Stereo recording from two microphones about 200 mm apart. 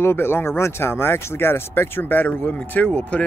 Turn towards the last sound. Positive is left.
turn(degrees=10)  # may be behind; listen again after turning